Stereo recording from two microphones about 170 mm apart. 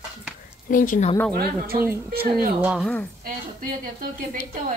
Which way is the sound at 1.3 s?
60° right (ahead or behind).